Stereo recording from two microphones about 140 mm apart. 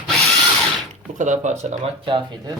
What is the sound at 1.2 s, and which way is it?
Speech, 60° right (ahead or behind).